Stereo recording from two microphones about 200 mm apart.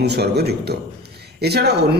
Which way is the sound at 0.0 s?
55° right (ahead or behind).